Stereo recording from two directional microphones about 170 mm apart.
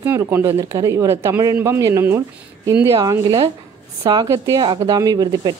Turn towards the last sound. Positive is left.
turn(degrees=-25)  # may be behind; listen again after turning